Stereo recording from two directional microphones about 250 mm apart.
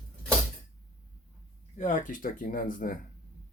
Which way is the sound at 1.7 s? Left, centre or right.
Left.